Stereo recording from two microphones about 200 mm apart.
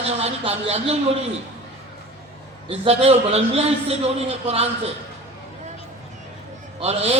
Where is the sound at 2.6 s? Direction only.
30° right (ahead or behind).